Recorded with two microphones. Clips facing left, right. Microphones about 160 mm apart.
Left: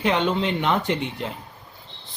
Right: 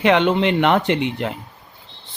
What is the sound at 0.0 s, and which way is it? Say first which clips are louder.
Speech: right 6 dB; 75° right (ahead or behind).